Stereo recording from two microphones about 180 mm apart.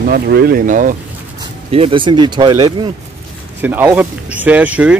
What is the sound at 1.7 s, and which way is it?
Speech, 30° right (ahead or behind).